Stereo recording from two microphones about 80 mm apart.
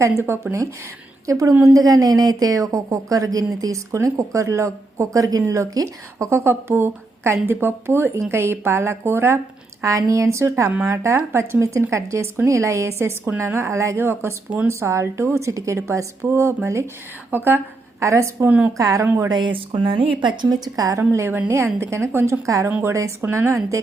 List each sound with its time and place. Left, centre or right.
0.3 s speech: right
1.3 s speech: right
18.0 s speech: right
18.4 s speech: right
18.8 s speech: right
19.0 s speech: right
19.3 s a woman's voice: right
21.1 s speech: right